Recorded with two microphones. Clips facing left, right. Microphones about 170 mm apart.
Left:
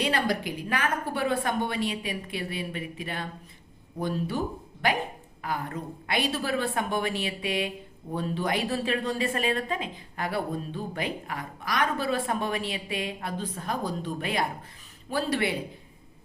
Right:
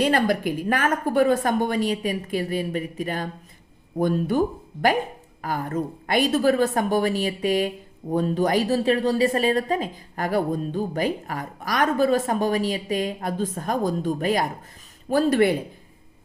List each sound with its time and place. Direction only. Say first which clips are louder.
0.0 s a woman's voice: right 6 dB; 50° right (ahead or behind)